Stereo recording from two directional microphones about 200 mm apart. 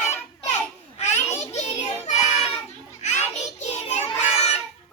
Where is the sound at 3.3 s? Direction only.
35° left (ahead or behind).